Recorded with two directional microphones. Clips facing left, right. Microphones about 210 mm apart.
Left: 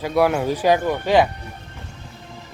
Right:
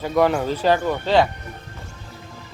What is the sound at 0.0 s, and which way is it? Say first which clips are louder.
Speech: even; 10° left (ahead or behind).